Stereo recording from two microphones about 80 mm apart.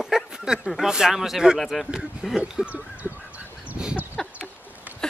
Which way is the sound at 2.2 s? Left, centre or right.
Centre.